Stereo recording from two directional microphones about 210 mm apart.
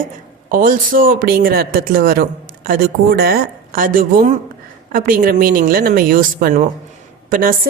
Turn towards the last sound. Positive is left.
turn(degrees=-40)  # may be behind; listen again after turning